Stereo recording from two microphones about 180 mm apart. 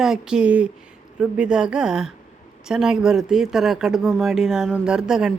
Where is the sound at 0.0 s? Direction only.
5° right (ahead or behind).